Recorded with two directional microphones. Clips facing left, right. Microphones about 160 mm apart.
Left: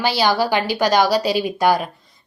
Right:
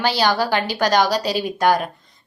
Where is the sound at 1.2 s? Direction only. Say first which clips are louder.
Left 3 dB; 40° right (ahead or behind).